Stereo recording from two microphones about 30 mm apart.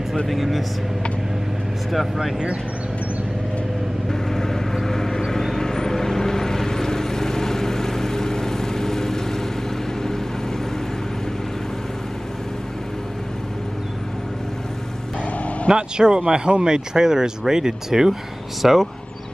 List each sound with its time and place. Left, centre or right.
0.3 s speech: centre
1.9 s speech: centre
4.1 s vehicle: centre
15.7 s speech: right
18.6 s speech: centre